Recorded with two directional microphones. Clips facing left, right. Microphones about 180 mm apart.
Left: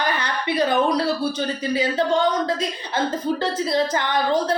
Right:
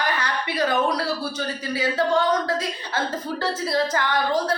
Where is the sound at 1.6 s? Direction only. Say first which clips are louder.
Left 2 dB; 20° left (ahead or behind).